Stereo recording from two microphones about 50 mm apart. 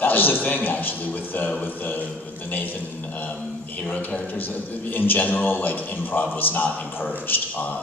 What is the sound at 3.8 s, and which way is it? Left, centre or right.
A man's voice, left.